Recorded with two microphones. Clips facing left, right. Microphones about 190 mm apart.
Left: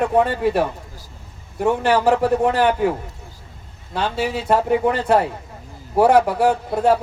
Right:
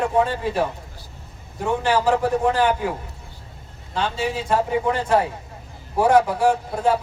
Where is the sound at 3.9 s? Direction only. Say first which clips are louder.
Left 2 dB; 60° left (ahead or behind).